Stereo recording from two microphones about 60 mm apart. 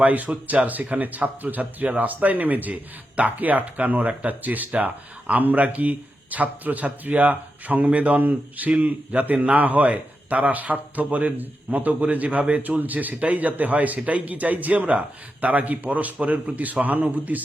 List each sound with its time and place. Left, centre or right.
0.0 s speech: right